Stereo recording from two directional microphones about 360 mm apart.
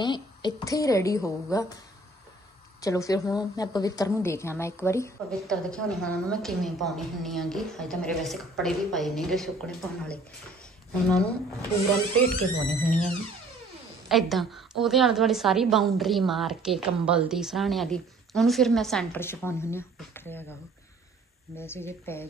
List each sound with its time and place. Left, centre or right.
0.0 s a woman's voice: centre
2.8 s a woman's voice: centre
21.5 s a woman's voice: centre